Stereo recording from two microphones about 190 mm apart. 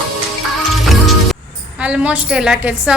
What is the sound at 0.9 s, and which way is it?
Music, centre (ahead or behind).